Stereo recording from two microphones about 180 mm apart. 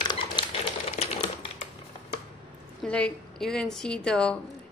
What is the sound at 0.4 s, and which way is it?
Typewriter, 25° left (ahead or behind).